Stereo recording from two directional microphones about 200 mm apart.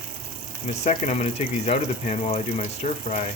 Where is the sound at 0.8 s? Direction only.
35° left (ahead or behind).